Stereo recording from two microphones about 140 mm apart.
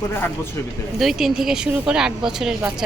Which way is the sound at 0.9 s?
Centre (ahead or behind).